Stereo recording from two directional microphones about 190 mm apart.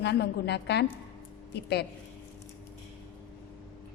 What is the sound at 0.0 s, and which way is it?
A woman's voice, 60° left (ahead or behind).